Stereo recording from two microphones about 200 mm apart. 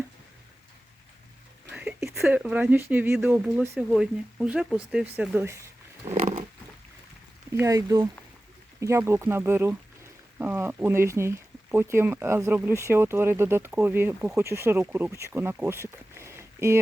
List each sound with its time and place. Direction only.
1.7 s a sound: 5° right (ahead or behind)
2.1 s speech: 5° right (ahead or behind)
6.1 s roaring cats: 35° right (ahead or behind)
7.5 s speech: 15° right (ahead or behind)